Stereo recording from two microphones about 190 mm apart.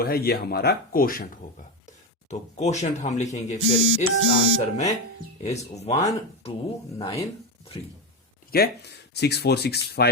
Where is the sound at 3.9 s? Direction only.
90° right.